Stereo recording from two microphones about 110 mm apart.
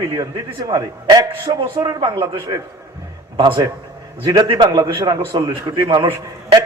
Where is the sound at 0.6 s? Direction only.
35° right (ahead or behind).